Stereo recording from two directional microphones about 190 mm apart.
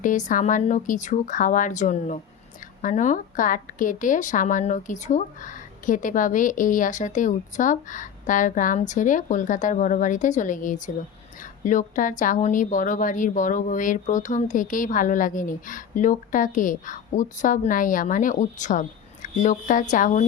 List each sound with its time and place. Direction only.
0.0 s a woman's voice: 40° left (ahead or behind)